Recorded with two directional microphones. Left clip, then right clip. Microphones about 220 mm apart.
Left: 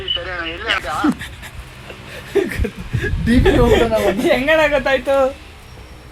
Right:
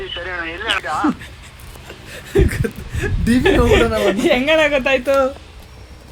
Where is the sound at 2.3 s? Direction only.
40° right (ahead or behind).